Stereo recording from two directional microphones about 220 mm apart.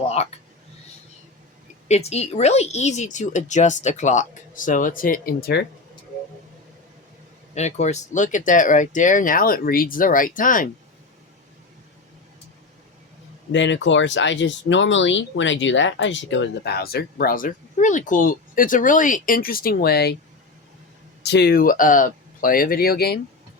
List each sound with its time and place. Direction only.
0.0 s a sound: 30° left (ahead or behind)
1.9 s speech: 30° left (ahead or behind); by 5.6 s 45° left (ahead or behind)
7.5 s speech: 30° left (ahead or behind)
13.5 s speech: 55° left (ahead or behind)
21.2 s speech: 50° left (ahead or behind)